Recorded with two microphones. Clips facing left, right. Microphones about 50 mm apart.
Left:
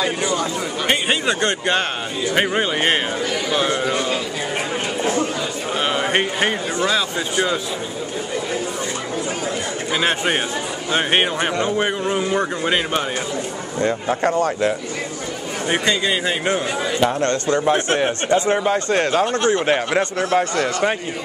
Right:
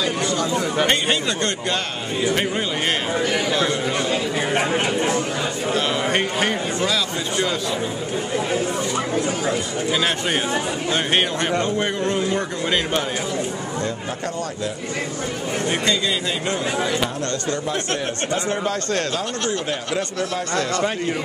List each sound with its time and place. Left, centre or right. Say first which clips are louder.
0.2 s speech: left 1 dB; centre
1.2 s a man's voice: left 4 dB; left
4.6 s speech: right 3 dB; right
5.8 s a man's voice: left 3 dB; centre
9.9 s a man's voice: left 4 dB; left
13.7 s speech: left 11 dB; left
15.7 s a man's voice: left 4 dB; left
19.6 s speech: left 6 dB; left